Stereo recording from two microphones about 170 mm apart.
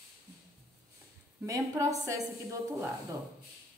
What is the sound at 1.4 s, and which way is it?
Speech, 20° right (ahead or behind).